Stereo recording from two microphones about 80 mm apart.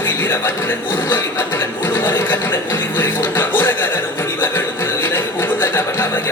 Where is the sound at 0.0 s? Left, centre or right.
Left.